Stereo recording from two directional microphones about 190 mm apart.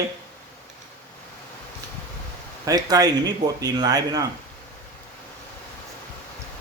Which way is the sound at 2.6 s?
20° right (ahead or behind).